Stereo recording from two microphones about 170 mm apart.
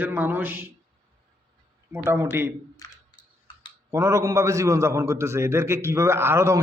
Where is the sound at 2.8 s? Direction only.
25° left (ahead or behind).